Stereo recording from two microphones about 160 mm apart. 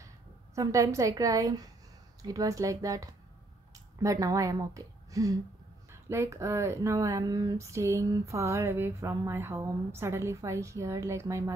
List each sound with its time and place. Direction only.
0.6 s a woman's voice: 20° right (ahead or behind)